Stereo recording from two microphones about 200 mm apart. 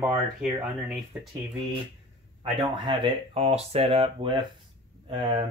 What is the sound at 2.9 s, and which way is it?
Speech, 25° right (ahead or behind).